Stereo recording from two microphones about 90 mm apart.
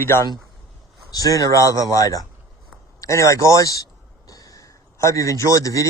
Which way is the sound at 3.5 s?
40° left (ahead or behind).